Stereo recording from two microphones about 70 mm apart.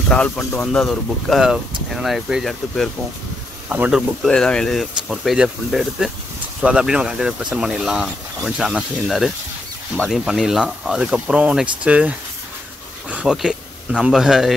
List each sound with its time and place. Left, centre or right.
0.1 s speech: centre
2.0 s speech: centre
2.4 s speech: centre
3.6 s speech: right
4.3 s speech: centre
5.1 s speech: centre
13.3 s speech: centre